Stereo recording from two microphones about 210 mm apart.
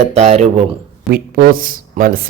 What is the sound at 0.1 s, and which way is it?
Speech, 30° right (ahead or behind).